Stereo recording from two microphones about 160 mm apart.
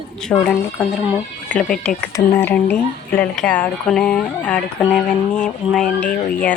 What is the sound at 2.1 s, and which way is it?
A woman's voice, 15° left (ahead or behind).